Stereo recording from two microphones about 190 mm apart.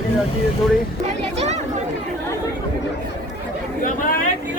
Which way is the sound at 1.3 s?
35° right (ahead or behind).